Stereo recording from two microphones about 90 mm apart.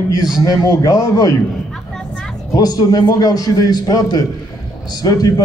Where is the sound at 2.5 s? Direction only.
50° left (ahead or behind).